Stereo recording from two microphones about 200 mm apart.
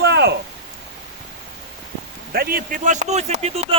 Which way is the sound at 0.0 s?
55° right (ahead or behind).